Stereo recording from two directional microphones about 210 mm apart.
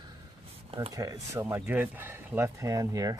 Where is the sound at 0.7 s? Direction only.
20° right (ahead or behind).